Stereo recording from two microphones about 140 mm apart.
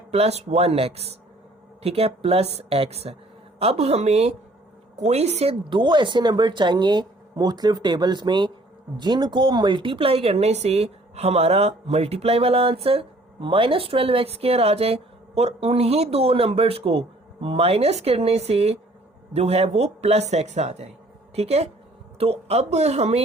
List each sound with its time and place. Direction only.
0.1 s speech: 50° right (ahead or behind)
5.6 s a woman's voice: 35° right (ahead or behind); by 23.2 s 50° right (ahead or behind)